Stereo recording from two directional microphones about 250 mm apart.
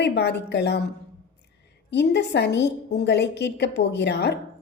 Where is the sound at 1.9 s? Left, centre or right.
Left.